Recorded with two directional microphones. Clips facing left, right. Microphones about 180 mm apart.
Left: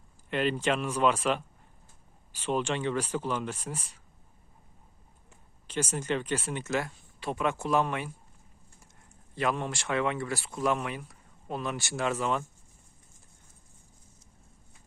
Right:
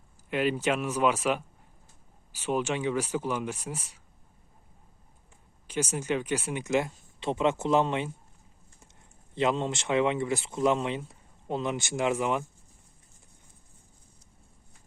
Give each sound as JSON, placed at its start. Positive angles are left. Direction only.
{"t": 0.3, "sound": "speech", "side_deg": -10}
{"t": 5.6, "sound": "speech", "side_deg": -10}
{"t": 9.3, "sound": "speech", "side_deg": -20}